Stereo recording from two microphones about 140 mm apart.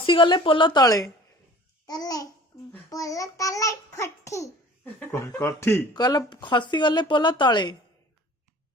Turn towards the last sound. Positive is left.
turn(degrees=30)  # may be behind; listen again after turning